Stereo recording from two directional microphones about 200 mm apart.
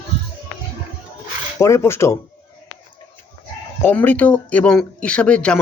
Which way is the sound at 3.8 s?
10° left (ahead or behind).